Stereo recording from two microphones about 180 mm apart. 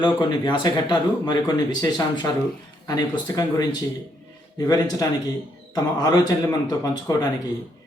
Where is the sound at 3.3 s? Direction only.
20° left (ahead or behind).